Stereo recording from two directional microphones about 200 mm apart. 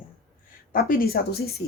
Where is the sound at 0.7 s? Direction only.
45° left (ahead or behind).